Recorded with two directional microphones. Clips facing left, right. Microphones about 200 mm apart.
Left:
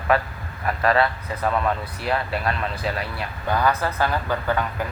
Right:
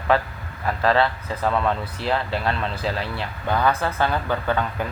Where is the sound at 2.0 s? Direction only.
25° right (ahead or behind).